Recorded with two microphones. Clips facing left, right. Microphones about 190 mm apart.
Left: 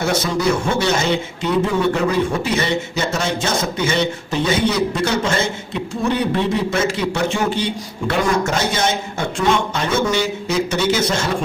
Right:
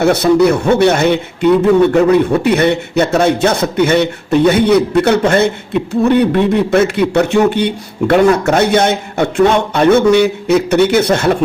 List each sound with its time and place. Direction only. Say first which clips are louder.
0.0 s a man's voice: right 9 dB; 65° right (ahead or behind)